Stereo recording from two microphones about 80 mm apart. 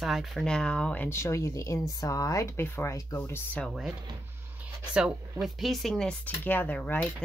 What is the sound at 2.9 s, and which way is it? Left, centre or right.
Speech, left.